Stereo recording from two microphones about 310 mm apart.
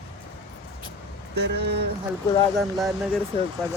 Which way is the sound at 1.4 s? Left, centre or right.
Right.